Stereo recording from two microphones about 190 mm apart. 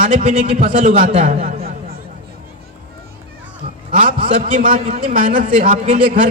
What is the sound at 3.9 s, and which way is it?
A man's voice, 35° right (ahead or behind).